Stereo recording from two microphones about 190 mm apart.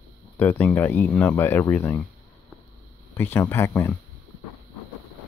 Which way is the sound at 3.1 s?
10° left (ahead or behind).